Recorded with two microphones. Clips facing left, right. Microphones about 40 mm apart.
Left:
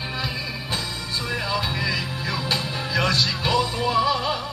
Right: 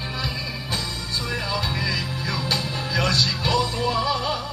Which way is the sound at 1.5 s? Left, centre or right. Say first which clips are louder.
Left 1 dB; centre.